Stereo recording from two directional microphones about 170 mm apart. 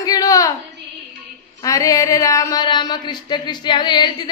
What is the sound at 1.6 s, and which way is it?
Speech, 20° left (ahead or behind).